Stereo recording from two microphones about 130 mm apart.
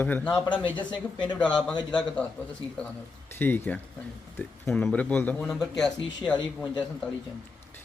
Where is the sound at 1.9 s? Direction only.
10° left (ahead or behind).